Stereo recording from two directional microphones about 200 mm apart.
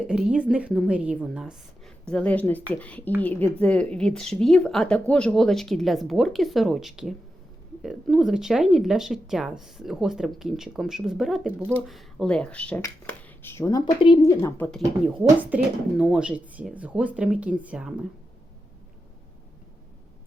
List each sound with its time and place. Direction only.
0.1 s speech: 5° right (ahead or behind)
2.0 s speech: 5° left (ahead or behind)
14.7 s speech: 5° right (ahead or behind)